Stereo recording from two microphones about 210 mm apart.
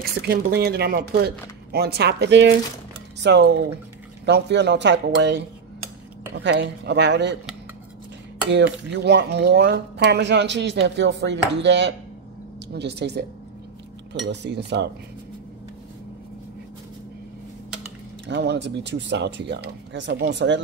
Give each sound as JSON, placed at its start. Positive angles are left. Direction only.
{"t": 0.3, "sound": "speech", "side_deg": -50}
{"t": 8.5, "sound": "speech", "side_deg": -55}
{"t": 18.2, "sound": "speech", "side_deg": -55}